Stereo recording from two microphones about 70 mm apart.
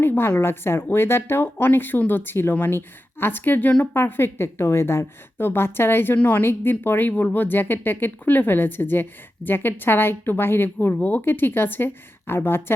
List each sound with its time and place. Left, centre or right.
0.0 s speech: left
3.9 s speech: left